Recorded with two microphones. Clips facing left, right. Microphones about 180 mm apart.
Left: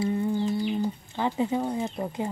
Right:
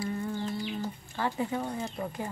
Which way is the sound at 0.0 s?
20° left (ahead or behind).